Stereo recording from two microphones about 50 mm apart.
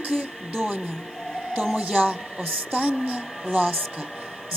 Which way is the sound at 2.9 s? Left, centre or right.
Centre.